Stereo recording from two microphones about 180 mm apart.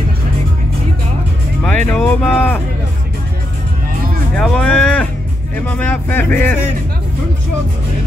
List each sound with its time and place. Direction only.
1.6 s speech: 5° left (ahead or behind)
4.4 s speech: 5° left (ahead or behind)